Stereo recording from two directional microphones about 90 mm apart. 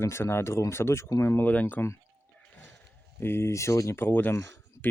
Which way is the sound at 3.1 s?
25° left (ahead or behind).